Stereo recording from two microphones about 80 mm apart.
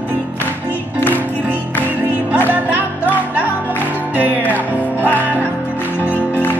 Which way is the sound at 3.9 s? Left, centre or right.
Centre.